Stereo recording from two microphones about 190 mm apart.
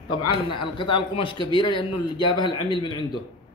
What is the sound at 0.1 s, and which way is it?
A man's voice, 25° left (ahead or behind).